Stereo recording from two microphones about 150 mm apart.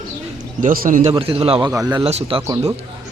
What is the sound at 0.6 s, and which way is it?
Speech, 70° right (ahead or behind).